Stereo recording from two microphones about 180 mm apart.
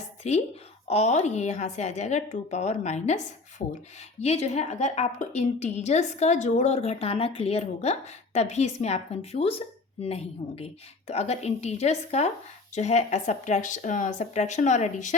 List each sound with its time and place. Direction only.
0.2 s a woman's voice: 40° left (ahead or behind)